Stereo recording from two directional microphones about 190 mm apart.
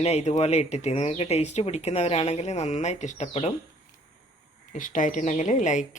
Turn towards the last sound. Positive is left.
turn(degrees=40)  # may be behind; listen again after turning